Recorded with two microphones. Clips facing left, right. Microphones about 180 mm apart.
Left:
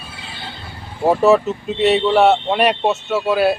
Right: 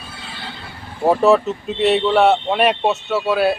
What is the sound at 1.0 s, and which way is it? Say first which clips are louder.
Speech: left 1 dB; centre (ahead or behind).